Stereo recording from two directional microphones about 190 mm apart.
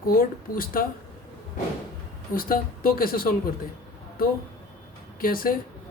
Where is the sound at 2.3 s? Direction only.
50° left (ahead or behind).